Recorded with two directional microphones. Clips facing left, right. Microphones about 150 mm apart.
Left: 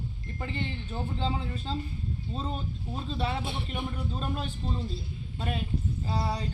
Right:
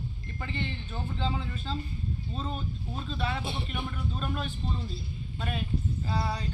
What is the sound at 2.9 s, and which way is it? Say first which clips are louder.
Speech: left 2 dB; 30° left (ahead or behind).